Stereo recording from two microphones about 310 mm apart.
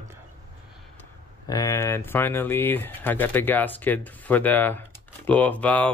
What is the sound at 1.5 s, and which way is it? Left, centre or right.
Speech, centre.